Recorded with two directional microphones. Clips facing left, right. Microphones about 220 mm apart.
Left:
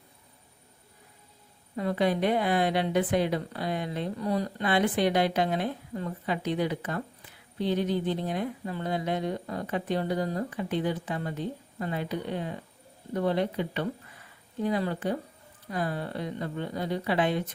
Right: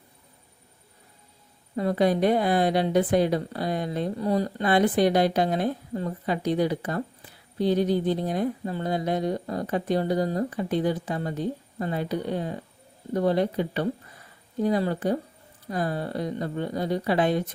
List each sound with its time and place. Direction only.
1.7 s a woman's voice: 40° right (ahead or behind)